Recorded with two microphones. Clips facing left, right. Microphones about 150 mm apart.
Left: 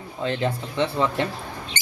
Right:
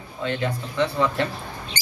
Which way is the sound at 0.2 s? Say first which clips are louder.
Left 1 dB; 30° left (ahead or behind).